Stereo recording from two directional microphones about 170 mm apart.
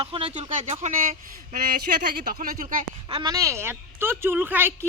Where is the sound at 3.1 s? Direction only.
25° right (ahead or behind).